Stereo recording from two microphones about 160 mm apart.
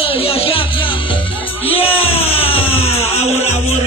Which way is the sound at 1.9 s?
35° left (ahead or behind).